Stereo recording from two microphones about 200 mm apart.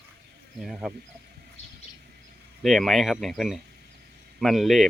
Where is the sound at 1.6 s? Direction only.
35° left (ahead or behind).